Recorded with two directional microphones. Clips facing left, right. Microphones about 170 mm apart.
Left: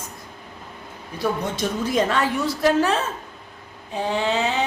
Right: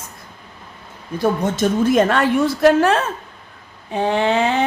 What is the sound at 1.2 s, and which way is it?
A woman's voice, 50° right (ahead or behind).